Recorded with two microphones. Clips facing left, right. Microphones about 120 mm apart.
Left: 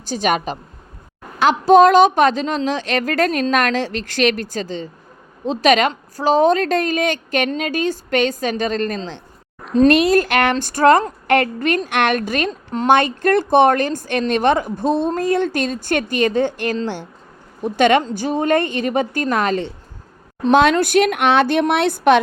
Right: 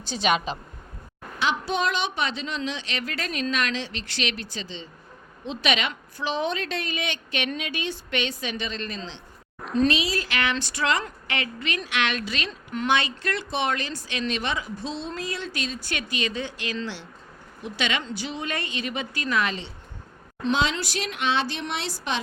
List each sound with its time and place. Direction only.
0.1 s speech: 45° left (ahead or behind)